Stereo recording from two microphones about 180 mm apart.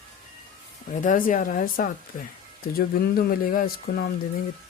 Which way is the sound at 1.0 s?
50° left (ahead or behind).